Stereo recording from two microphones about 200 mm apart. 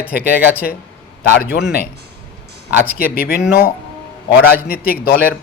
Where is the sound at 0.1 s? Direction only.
50° left (ahead or behind).